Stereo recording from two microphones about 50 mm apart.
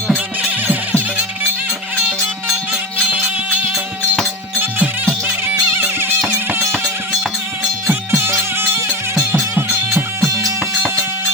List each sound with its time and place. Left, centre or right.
5.7 s music: right
8.1 s music: right